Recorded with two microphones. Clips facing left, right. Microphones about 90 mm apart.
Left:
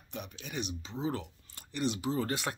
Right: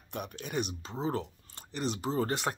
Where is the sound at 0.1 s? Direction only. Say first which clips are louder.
Right 5 dB; 50° right (ahead or behind).